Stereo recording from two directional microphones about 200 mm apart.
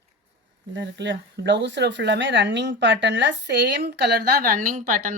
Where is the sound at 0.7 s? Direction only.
65° right (ahead or behind).